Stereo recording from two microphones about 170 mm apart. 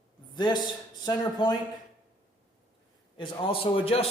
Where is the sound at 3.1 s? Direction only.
30° left (ahead or behind).